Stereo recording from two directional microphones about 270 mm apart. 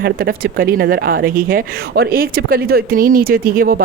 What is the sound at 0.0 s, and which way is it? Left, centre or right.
Speech, right.